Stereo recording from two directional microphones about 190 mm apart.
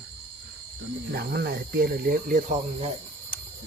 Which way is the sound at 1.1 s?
55° right (ahead or behind).